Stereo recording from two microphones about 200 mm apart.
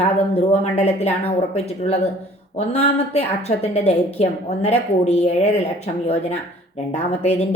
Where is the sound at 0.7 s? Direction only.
35° left (ahead or behind).